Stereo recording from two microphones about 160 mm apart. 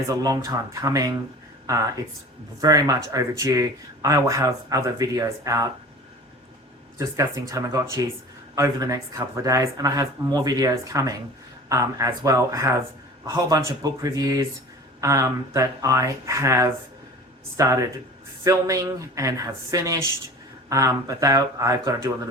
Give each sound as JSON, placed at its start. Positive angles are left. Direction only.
{"t": 0.1, "sound": "speech", "side_deg": -20}
{"t": 7.0, "sound": "speech", "side_deg": -20}